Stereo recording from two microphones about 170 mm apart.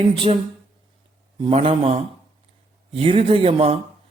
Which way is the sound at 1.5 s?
35° right (ahead or behind).